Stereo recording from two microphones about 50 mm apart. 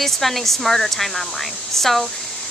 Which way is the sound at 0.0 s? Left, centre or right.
Centre.